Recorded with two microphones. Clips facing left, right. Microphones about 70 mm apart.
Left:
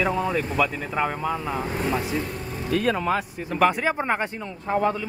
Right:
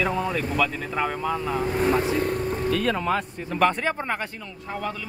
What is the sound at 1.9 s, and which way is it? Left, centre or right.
Speech, right.